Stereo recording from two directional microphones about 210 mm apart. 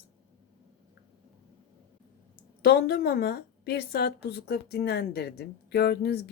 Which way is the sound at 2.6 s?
50° left (ahead or behind).